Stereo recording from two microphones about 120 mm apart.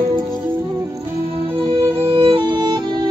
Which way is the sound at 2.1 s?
50° right (ahead or behind).